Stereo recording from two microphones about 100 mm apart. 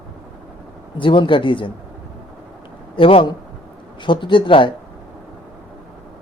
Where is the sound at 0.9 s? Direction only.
55° left (ahead or behind).